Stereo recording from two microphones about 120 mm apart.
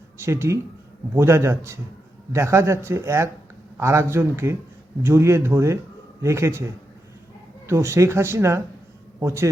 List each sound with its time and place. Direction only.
0.2 s speech: 20° right (ahead or behind)
7.7 s speech: 25° right (ahead or behind)